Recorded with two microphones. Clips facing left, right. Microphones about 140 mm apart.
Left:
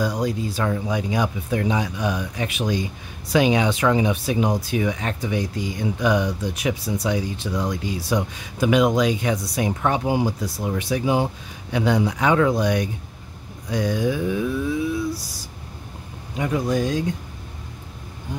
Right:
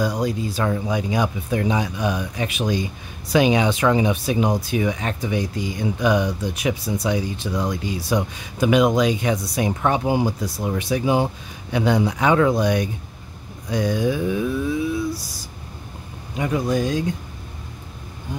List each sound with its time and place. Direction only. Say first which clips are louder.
0.0 s speech: right 1 dB; 15° right (ahead or behind)
16.3 s speech: right 1 dB; 5° right (ahead or behind)